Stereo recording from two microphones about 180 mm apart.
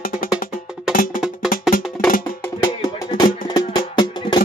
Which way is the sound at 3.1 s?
20° left (ahead or behind).